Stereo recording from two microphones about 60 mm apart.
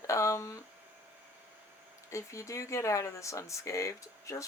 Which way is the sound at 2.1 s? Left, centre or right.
Left.